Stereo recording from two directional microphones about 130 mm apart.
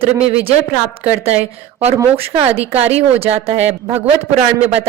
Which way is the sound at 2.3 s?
50° right (ahead or behind).